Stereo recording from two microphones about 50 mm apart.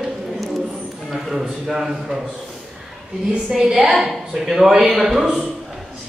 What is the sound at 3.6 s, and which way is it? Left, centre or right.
A woman's voice, centre.